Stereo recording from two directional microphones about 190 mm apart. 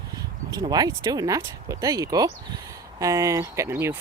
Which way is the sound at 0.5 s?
20° right (ahead or behind).